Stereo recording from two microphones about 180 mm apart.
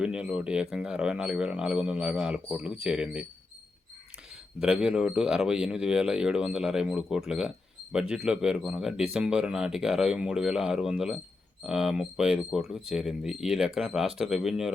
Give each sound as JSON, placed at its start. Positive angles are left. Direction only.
{"t": 0.0, "sound": "speech", "side_deg": -5}
{"t": 4.6, "sound": "speech", "side_deg": -5}